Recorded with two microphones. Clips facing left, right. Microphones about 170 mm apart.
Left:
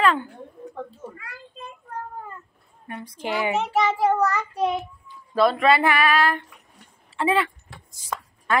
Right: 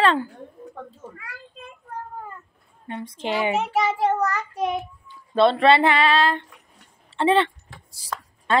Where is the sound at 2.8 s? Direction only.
25° right (ahead or behind).